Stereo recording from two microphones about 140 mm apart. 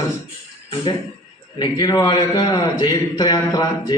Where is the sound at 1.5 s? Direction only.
30° left (ahead or behind).